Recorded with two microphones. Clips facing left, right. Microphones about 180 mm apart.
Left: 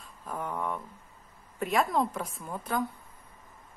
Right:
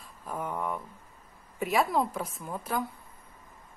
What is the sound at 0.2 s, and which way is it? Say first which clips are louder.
A woman's voice: right 1 dB; 5° right (ahead or behind).